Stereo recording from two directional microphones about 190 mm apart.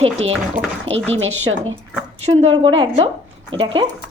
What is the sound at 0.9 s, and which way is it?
Speech, 90° right.